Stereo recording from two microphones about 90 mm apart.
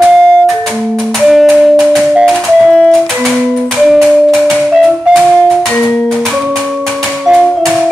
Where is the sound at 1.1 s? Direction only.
Centre (ahead or behind).